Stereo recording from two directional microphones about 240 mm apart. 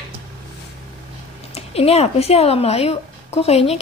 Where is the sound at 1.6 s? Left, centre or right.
Left.